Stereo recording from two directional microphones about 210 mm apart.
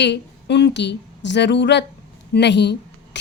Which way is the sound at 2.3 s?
55° left (ahead or behind).